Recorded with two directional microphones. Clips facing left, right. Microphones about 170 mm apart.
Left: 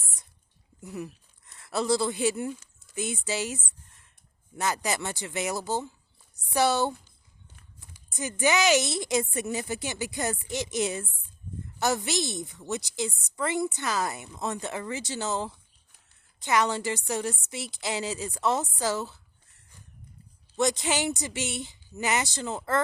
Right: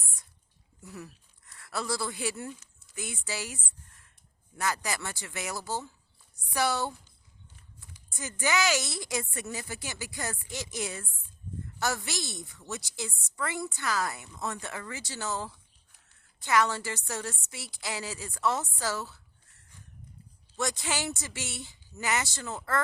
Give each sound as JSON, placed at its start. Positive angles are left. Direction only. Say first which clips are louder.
{"t": 0.8, "sound": "a woman's voice", "louder": "left 7 dB", "side_deg": 20}
{"t": 20.6, "sound": "a woman's voice", "louder": "left 6 dB", "side_deg": 20}